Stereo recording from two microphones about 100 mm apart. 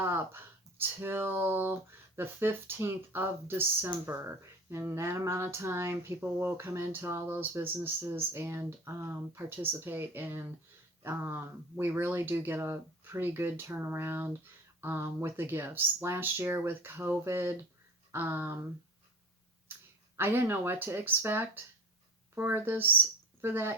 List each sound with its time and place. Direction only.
0.0 s speech: 25° right (ahead or behind)
20.1 s speech: 25° right (ahead or behind)